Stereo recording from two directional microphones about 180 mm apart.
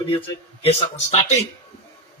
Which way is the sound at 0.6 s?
35° left (ahead or behind).